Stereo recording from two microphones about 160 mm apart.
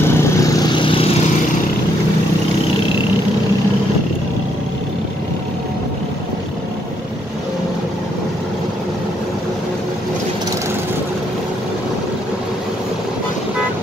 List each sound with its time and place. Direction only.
0.0 s vehicle: 20° left (ahead or behind)